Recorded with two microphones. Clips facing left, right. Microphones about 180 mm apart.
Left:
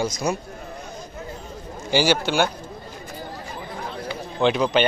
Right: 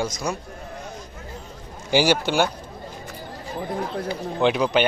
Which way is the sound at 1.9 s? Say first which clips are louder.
Right 1 dB; 15° right (ahead or behind).